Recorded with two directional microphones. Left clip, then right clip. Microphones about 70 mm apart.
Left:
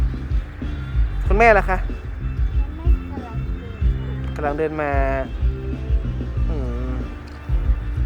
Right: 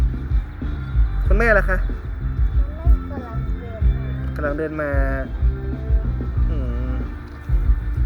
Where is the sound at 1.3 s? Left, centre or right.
Centre.